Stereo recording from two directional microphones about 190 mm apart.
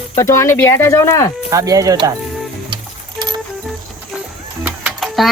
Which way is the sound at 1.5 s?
15° right (ahead or behind).